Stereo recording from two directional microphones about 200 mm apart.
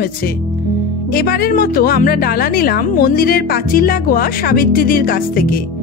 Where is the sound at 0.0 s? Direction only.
50° left (ahead or behind).